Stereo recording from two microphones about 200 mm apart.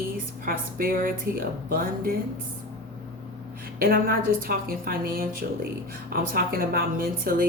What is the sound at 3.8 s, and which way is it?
A woman's voice, 45° right (ahead or behind).